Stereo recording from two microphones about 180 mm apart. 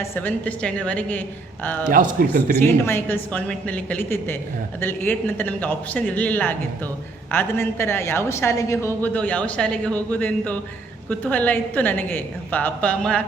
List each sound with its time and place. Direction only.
0.0 s a woman's voice: 10° left (ahead or behind)
1.9 s a man's voice: 50° right (ahead or behind)
2.6 s a woman's voice: 15° left (ahead or behind)